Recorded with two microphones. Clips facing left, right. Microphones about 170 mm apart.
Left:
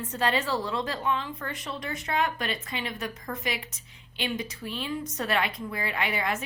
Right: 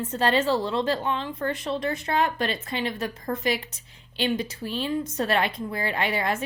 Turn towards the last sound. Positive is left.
turn(degrees=-30)  # may be behind; listen again after turning